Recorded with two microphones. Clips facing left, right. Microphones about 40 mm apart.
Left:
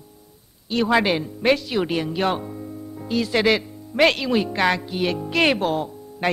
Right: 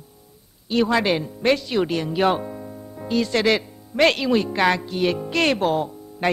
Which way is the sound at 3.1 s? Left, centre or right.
Centre.